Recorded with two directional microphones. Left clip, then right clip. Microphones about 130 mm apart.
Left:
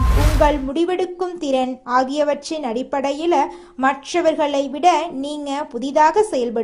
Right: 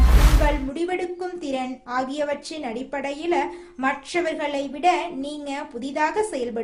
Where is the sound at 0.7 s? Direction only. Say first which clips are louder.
Left 6 dB; 40° left (ahead or behind).